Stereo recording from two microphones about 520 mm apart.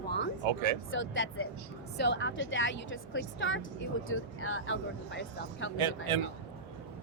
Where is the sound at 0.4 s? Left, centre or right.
Right.